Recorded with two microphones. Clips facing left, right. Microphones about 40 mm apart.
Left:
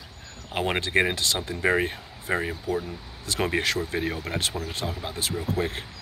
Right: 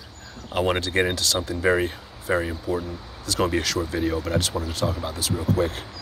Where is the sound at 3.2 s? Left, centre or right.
Left.